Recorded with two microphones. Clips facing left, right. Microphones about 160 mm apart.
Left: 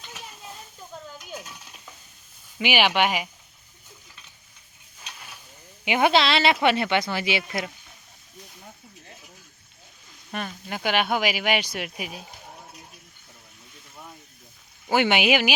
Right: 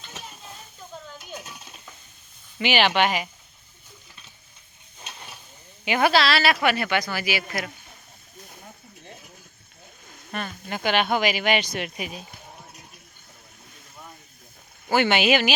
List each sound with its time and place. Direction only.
2.6 s speech: 10° left (ahead or behind)
4.9 s a sound: 30° right (ahead or behind)
5.8 s speech: 15° left (ahead or behind)
10.7 s speech: 10° left (ahead or behind)
14.8 s speech: 15° left (ahead or behind)